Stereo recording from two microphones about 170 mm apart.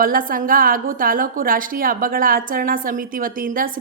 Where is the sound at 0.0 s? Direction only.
55° right (ahead or behind).